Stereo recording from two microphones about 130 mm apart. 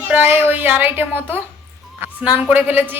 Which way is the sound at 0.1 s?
15° right (ahead or behind).